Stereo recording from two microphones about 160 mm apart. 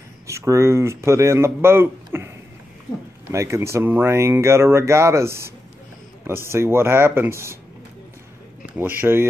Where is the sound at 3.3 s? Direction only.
20° right (ahead or behind).